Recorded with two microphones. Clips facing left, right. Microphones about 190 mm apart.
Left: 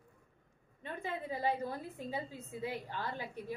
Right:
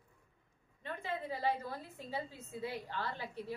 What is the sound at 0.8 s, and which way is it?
A woman's voice, 20° left (ahead or behind).